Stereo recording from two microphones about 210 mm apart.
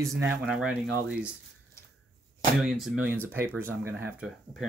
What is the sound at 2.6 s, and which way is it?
Speech, centre (ahead or behind).